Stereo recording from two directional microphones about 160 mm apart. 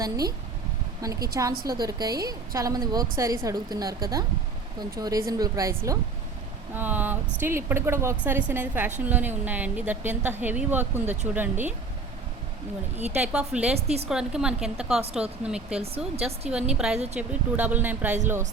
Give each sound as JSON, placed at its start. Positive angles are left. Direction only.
{"t": 0.0, "sound": "a woman's voice", "side_deg": -25}
{"t": 13.1, "sound": "speech", "side_deg": -10}
{"t": 13.7, "sound": "speech", "side_deg": -40}
{"t": 14.1, "sound": "a woman's voice", "side_deg": -5}